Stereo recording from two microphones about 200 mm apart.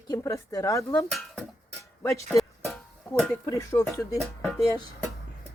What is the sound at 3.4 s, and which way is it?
Speech, 15° left (ahead or behind).